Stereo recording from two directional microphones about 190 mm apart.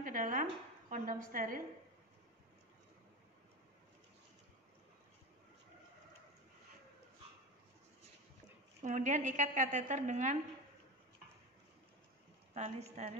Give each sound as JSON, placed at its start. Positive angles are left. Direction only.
{"t": 0.0, "sound": "a woman's voice", "side_deg": -45}
{"t": 8.8, "sound": "a woman's voice", "side_deg": -40}
{"t": 12.5, "sound": "a woman's voice", "side_deg": -35}